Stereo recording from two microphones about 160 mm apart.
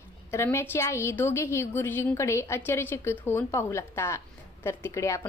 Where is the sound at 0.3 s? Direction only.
15° left (ahead or behind).